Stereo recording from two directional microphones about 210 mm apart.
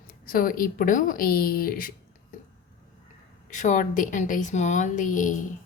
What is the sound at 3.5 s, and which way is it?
Speech, 35° left (ahead or behind).